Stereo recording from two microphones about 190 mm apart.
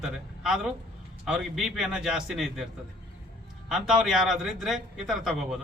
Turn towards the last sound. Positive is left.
turn(degrees=0)  # may be behind; listen again after turning